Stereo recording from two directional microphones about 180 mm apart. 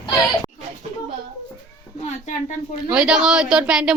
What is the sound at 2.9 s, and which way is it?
Speech, 5° right (ahead or behind).